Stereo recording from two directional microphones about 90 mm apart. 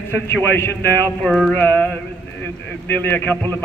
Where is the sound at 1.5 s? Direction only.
25° left (ahead or behind).